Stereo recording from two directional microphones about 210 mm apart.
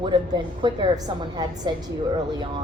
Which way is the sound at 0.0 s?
20° right (ahead or behind).